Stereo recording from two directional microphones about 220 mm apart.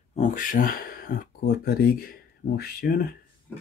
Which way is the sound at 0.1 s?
35° left (ahead or behind).